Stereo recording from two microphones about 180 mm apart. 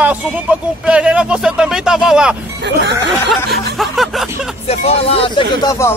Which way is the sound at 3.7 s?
Centre (ahead or behind).